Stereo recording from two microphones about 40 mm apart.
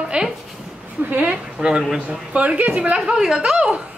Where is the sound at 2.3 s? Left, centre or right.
Right.